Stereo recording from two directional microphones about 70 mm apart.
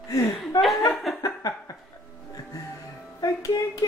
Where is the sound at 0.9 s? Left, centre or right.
Centre.